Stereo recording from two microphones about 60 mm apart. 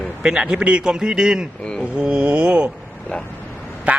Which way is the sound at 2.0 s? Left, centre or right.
Centre.